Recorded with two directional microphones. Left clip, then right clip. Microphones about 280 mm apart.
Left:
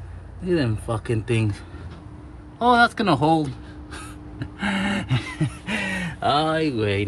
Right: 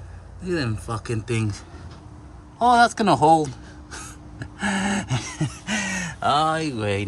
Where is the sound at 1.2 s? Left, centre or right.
Centre.